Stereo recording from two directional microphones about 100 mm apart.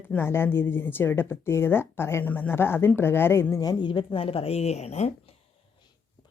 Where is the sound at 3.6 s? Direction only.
45° left (ahead or behind); by 5.4 s 90° left.